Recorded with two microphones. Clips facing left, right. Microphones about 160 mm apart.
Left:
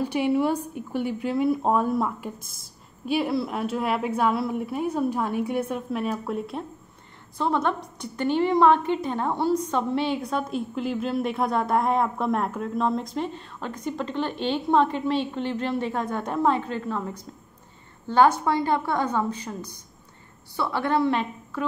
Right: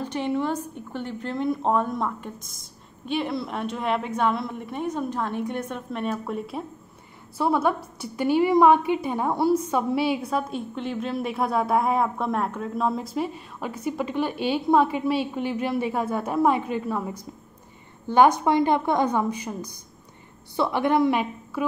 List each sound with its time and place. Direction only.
0.0 s a woman's voice: 10° left (ahead or behind); by 21.6 s 10° right (ahead or behind)